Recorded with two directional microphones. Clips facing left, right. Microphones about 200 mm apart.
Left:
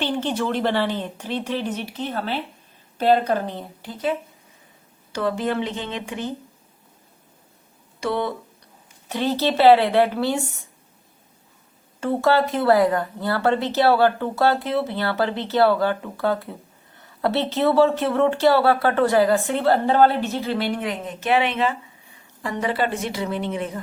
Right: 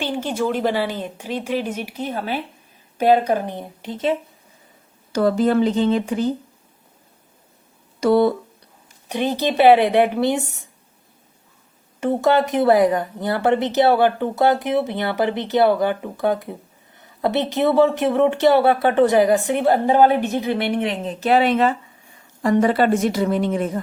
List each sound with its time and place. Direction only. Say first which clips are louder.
0.0 s speech: right 1 dB; 10° right (ahead or behind)
5.1 s speech: right 7 dB; 40° right (ahead or behind)
8.0 s speech: right 9 dB; 40° right (ahead or behind)
9.0 s speech: right 1 dB; 15° right (ahead or behind)
11.9 s a woman's voice: right 2 dB; 20° right (ahead or behind); by 23.8 s 45° right (ahead or behind)